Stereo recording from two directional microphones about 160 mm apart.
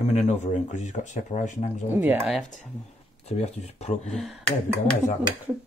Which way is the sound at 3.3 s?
40° left (ahead or behind).